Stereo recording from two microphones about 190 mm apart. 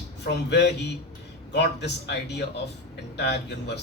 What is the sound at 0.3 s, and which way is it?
A man's voice, 65° left (ahead or behind).